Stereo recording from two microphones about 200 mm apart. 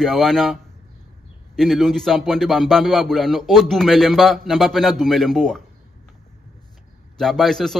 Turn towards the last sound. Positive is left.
turn(degrees=0)  # may be behind; listen again after turning